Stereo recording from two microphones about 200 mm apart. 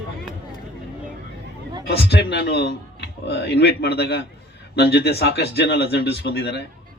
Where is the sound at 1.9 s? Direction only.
55° left (ahead or behind).